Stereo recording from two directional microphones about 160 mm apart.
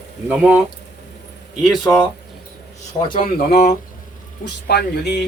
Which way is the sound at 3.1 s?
60° left (ahead or behind).